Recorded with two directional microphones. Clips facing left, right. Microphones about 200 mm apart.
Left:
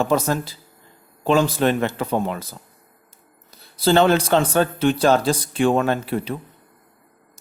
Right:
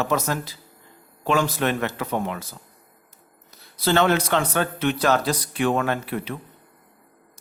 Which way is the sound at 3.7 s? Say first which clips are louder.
Left 4 dB; 30° left (ahead or behind).